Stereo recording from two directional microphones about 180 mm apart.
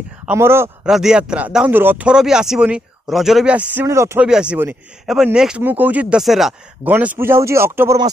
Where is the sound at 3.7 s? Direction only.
15° right (ahead or behind).